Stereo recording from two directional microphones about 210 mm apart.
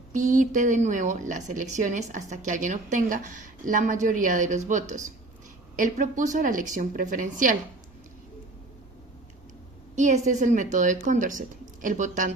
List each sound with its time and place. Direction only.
0.1 s speech: 35° right (ahead or behind)
9.9 s speech: 35° right (ahead or behind)